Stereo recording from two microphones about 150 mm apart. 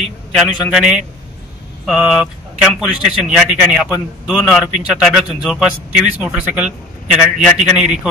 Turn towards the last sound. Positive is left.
turn(degrees=-5)  # may be behind; listen again after turning